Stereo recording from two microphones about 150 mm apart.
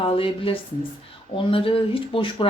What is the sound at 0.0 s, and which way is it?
Speech, 40° left (ahead or behind).